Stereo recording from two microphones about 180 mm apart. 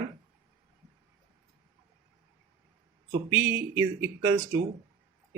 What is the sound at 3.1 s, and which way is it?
A man's voice, 10° right (ahead or behind).